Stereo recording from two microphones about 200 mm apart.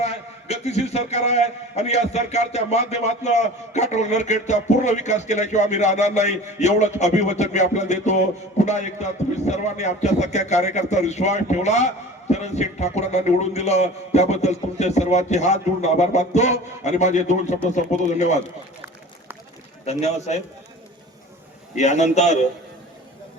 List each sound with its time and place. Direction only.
0.0 s a man's voice: 30° left (ahead or behind)
19.8 s a man's voice: 35° left (ahead or behind)
21.8 s a man's voice: 35° left (ahead or behind)